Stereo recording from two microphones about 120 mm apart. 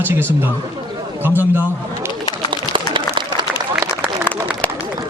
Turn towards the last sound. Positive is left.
turn(degrees=-40)  # may be behind; listen again after turning